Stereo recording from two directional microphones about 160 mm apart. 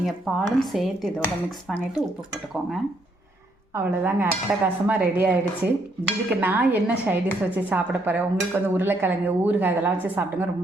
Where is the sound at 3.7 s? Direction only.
15° right (ahead or behind).